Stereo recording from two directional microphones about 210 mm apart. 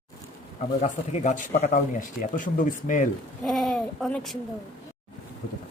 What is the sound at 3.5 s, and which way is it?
Speech, centre (ahead or behind).